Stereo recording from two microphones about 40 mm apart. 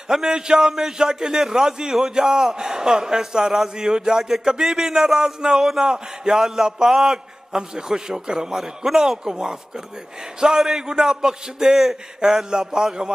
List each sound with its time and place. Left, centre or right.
0.1 s a man's voice: centre